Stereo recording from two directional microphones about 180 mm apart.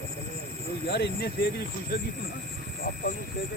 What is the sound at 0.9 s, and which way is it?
Speech, 65° left (ahead or behind).